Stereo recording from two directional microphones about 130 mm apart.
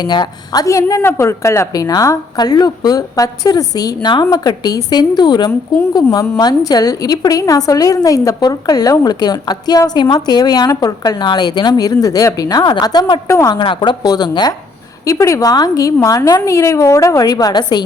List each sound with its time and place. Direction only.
0.0 s a woman's voice: 30° left (ahead or behind)
13.6 s a woman's voice: 35° left (ahead or behind)